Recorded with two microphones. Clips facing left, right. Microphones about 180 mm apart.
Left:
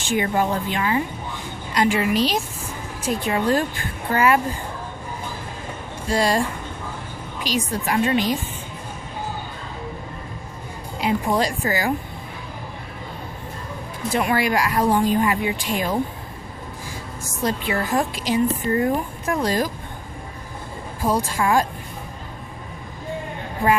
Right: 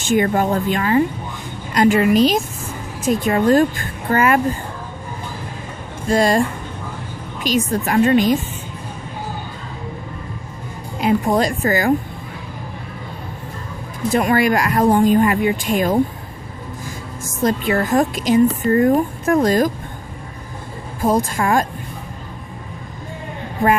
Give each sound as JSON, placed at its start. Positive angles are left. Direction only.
{"t": 0.0, "sound": "speech", "side_deg": -50}
{"t": 6.1, "sound": "speech", "side_deg": -50}
{"t": 7.4, "sound": "speech", "side_deg": -50}
{"t": 11.0, "sound": "speech", "side_deg": -50}
{"t": 14.1, "sound": "speech", "side_deg": -45}
{"t": 17.2, "sound": "speech", "side_deg": -50}
{"t": 21.0, "sound": "speech", "side_deg": -50}